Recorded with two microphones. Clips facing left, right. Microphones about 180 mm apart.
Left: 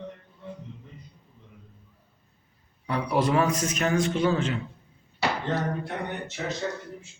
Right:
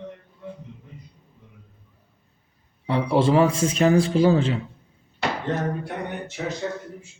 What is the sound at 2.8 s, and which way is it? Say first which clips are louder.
A man's voice: right 5 dB; 25° right (ahead or behind).